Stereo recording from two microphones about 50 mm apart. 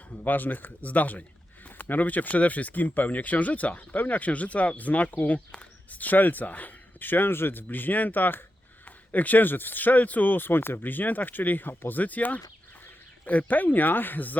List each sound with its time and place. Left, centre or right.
0.1 s speech: left